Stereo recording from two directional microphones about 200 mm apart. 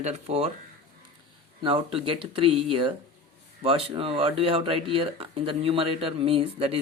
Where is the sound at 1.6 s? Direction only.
25° right (ahead or behind).